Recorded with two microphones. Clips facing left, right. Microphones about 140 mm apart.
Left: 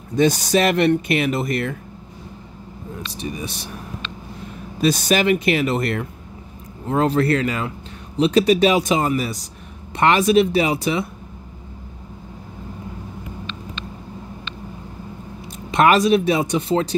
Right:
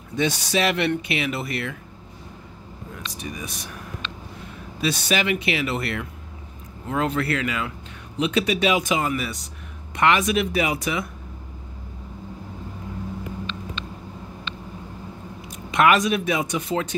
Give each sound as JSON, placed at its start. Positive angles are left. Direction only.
{"t": 0.1, "sound": "speech", "side_deg": 40}
{"t": 3.0, "sound": "speech", "side_deg": 30}
{"t": 4.8, "sound": "speech", "side_deg": 40}
{"t": 15.4, "sound": "speech", "side_deg": 35}